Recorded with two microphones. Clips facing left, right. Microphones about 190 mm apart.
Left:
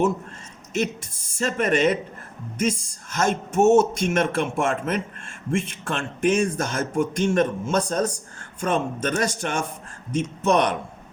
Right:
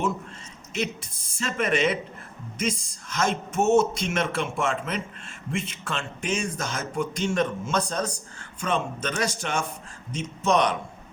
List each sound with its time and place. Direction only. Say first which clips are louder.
0.7 s speech: left 4 dB; 45° left (ahead or behind)